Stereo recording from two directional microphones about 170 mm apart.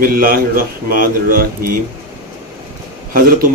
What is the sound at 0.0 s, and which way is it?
A man's voice, 60° right (ahead or behind).